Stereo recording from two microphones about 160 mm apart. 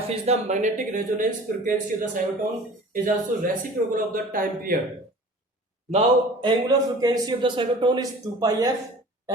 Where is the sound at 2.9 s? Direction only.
60° right (ahead or behind).